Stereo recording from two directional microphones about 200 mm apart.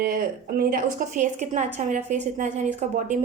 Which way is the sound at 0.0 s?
45° right (ahead or behind).